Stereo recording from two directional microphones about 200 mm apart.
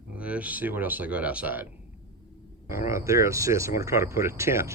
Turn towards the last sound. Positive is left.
turn(degrees=-15)  # may be behind; listen again after turning